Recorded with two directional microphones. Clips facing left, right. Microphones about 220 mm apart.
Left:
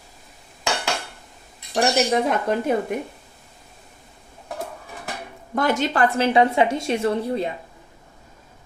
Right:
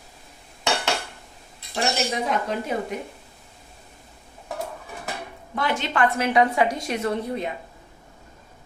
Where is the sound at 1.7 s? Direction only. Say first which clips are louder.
Left 6 dB; 55° left (ahead or behind).